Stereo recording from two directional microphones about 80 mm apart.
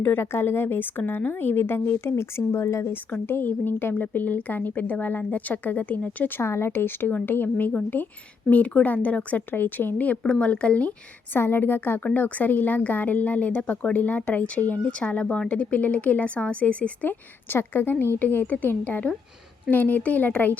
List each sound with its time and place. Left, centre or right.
0.0 s a woman's voice: left
2.9 s a woman's voice: left
11.3 s a woman's voice: left